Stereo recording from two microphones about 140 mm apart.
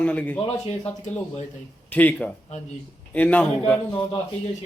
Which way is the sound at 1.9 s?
10° left (ahead or behind).